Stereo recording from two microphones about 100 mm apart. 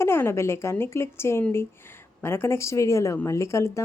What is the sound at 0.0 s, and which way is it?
Speech, 25° left (ahead or behind).